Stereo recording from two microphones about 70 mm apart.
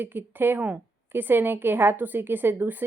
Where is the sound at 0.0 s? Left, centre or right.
Right.